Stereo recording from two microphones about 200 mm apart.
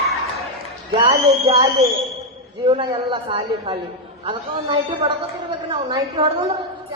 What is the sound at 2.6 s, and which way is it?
A man's voice, 25° right (ahead or behind).